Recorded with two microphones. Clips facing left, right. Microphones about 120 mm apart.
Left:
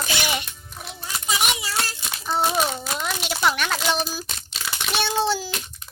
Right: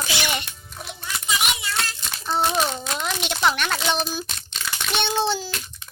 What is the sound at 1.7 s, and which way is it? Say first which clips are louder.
A child's voice: even; 10° left (ahead or behind).